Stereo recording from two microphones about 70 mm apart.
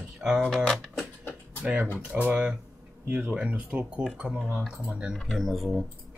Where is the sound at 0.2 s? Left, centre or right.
Centre.